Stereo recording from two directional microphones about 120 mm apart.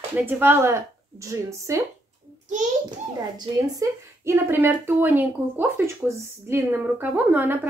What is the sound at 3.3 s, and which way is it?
Speech, 35° right (ahead or behind).